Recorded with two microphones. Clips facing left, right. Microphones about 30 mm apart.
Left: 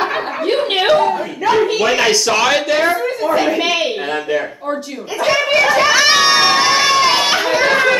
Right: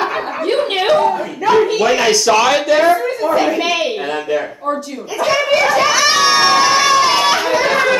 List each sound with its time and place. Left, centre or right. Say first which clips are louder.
0.0 s chuckle: even; centre
1.1 s a sound: right 2 dB; centre
1.8 s a woman's voice: right 1 dB; centre
5.5 s crowd: left 1 dB; centre